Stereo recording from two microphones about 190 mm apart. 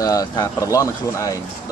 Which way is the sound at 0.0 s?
20° left (ahead or behind).